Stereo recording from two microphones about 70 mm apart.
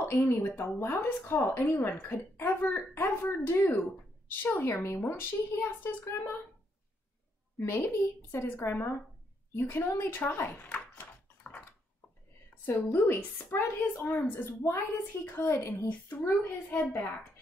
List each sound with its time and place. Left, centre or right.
0.1 s speech: left
4.8 s speech: left
7.5 s speech: left
12.6 s speech: left
16.7 s speech: left